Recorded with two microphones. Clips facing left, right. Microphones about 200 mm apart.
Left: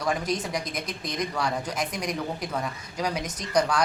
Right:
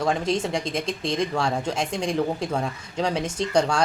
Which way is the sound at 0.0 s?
25° right (ahead or behind).